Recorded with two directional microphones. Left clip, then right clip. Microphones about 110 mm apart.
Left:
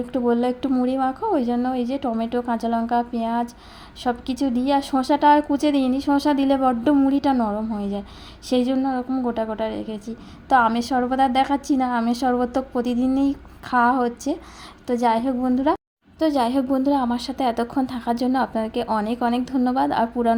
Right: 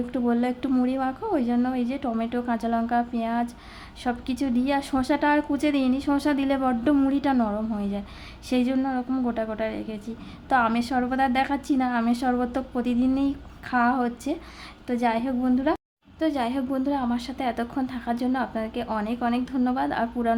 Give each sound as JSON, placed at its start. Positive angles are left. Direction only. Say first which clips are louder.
{"t": 0.1, "sound": "a woman's voice", "louder": "left 6 dB", "side_deg": 20}
{"t": 7.3, "sound": "a woman's voice", "louder": "left 2 dB", "side_deg": 10}
{"t": 15.3, "sound": "a woman's voice", "louder": "left 4 dB", "side_deg": 15}
{"t": 16.1, "sound": "a woman's voice", "louder": "left 6 dB", "side_deg": 40}